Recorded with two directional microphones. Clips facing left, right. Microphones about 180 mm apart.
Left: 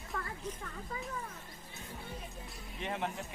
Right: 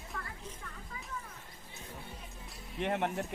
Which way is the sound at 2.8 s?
60° right (ahead or behind).